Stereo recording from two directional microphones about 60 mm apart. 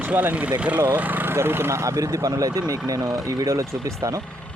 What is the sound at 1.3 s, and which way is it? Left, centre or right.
Speech, right.